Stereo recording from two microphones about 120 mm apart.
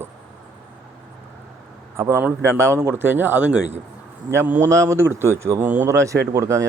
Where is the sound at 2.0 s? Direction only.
20° right (ahead or behind).